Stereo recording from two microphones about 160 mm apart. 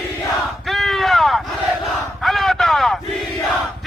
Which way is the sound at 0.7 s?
Centre (ahead or behind).